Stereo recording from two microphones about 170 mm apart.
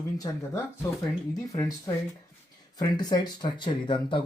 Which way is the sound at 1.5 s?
20° left (ahead or behind).